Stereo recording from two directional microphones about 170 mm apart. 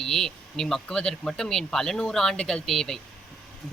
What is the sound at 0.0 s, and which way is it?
Speech, 5° left (ahead or behind).